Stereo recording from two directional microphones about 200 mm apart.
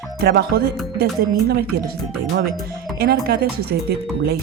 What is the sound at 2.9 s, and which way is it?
Speech, 50° right (ahead or behind).